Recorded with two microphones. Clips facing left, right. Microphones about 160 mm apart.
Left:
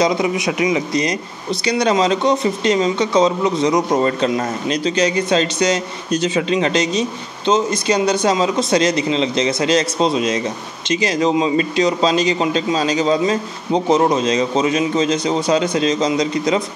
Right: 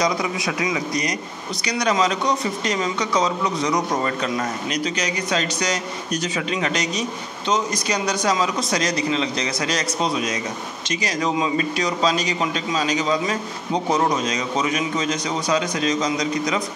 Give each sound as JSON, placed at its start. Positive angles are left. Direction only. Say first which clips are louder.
{"t": 0.0, "sound": "speech", "louder": "left 6 dB", "side_deg": 25}